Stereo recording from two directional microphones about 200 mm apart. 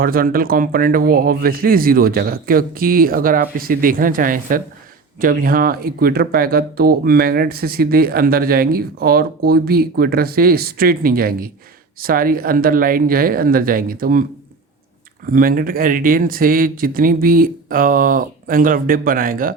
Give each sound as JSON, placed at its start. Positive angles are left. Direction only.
{"t": 0.0, "sound": "speech", "side_deg": -45}
{"t": 15.3, "sound": "speech", "side_deg": -45}